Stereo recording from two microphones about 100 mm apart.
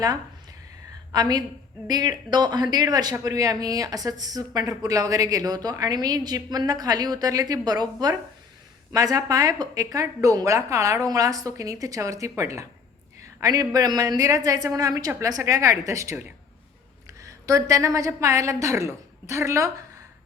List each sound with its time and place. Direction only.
1.1 s speech: 40° right (ahead or behind)